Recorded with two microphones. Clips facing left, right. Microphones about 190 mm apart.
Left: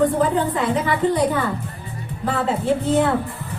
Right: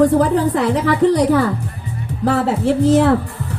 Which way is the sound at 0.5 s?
80° right.